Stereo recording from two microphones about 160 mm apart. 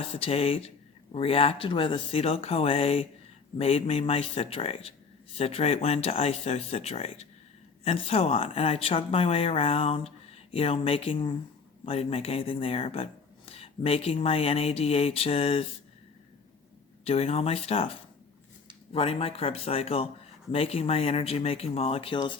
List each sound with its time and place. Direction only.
0.1 s speech: 40° left (ahead or behind)
17.0 s speech: 40° left (ahead or behind)
18.9 s speech: 35° left (ahead or behind)